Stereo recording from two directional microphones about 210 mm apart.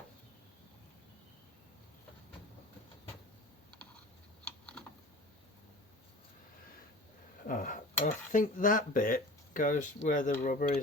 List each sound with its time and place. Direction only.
4.4 s typing: 5° left (ahead or behind)
7.4 s speech: 40° left (ahead or behind)